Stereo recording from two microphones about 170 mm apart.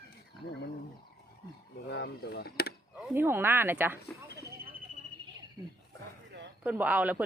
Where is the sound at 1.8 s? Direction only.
80° left.